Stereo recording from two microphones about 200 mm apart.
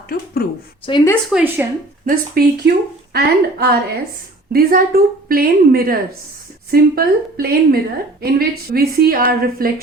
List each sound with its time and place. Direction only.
0.4 s a woman's voice: 50° left (ahead or behind)
0.9 s speech: 20° left (ahead or behind)
1.3 s a woman's voice: 5° right (ahead or behind)
2.0 s a woman's voice: 50° right (ahead or behind)